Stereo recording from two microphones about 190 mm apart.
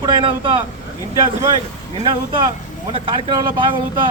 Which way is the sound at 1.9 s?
25° right (ahead or behind).